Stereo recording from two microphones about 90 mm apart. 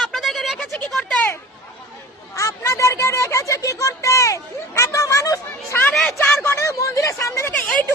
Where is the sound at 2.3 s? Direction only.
35° left (ahead or behind).